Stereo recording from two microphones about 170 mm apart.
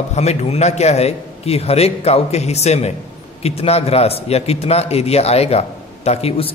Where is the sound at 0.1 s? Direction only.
40° left (ahead or behind).